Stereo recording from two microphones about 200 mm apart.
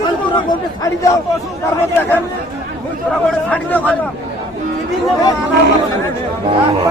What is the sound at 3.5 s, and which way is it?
Speech, 10° left (ahead or behind).